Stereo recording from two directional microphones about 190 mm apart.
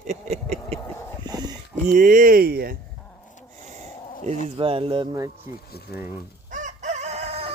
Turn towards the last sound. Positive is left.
turn(degrees=-35)  # may be behind; listen again after turning